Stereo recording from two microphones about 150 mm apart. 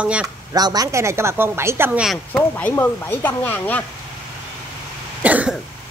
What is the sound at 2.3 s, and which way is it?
Speech, 10° left (ahead or behind).